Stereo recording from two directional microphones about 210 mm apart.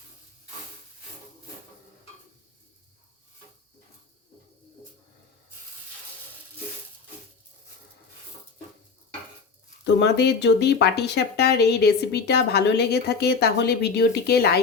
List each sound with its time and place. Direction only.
9.8 s speech: 55° left (ahead or behind)